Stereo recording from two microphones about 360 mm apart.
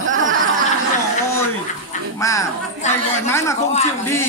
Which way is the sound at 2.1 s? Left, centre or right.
Centre.